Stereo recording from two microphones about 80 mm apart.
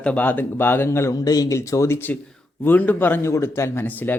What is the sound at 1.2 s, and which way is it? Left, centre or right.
Speech, left.